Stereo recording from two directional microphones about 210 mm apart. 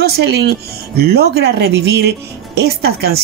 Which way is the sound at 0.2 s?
55° right (ahead or behind).